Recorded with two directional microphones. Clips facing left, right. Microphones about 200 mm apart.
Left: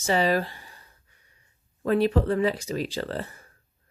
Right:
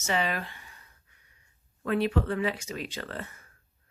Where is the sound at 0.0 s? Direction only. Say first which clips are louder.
Left 7 dB; 35° left (ahead or behind).